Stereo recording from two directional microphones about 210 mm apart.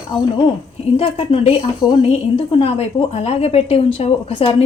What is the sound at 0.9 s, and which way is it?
Speech, 25° left (ahead or behind).